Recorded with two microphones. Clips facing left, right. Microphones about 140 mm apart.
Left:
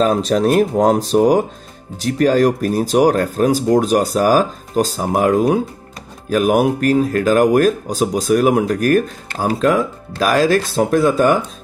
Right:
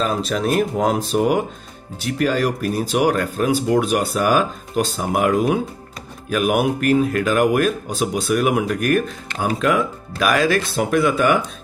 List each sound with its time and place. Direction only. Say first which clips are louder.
0.3 s speech: left 5 dB; 40° left (ahead or behind)